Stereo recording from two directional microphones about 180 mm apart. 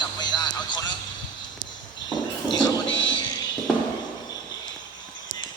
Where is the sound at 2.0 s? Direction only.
25° left (ahead or behind).